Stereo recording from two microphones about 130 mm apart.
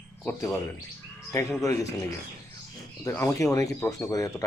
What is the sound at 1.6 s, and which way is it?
Speech, 25° left (ahead or behind).